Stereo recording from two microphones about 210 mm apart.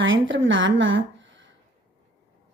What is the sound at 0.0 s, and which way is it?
Speech, 60° right (ahead or behind).